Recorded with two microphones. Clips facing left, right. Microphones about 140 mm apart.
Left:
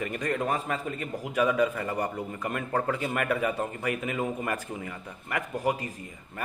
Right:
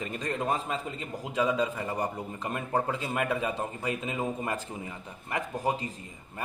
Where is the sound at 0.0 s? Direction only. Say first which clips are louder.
Left 3 dB; 25° right (ahead or behind).